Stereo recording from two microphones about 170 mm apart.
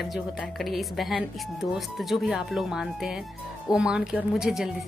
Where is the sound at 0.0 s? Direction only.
Centre (ahead or behind).